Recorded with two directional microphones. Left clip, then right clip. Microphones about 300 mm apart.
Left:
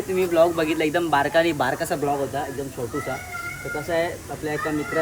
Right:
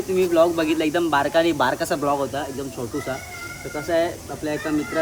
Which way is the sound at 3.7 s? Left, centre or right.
Centre.